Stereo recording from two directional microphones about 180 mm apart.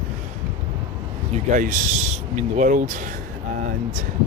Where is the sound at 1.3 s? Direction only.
50° right (ahead or behind).